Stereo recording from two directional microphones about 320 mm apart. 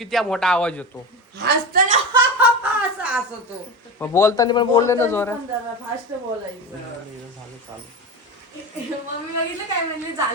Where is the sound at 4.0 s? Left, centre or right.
Centre.